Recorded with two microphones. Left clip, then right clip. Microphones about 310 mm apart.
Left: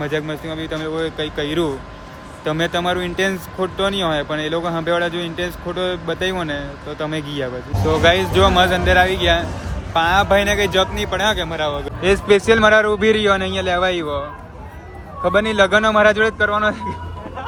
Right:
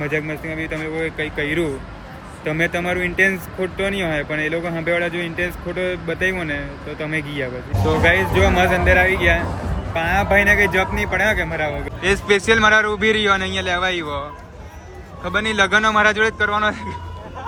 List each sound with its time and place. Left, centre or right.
0.4 s speech: centre
4.6 s speech: left
5.0 s speech: centre
12.0 s speech: centre